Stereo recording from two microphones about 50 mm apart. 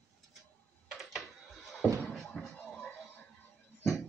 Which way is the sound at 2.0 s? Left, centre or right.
Centre.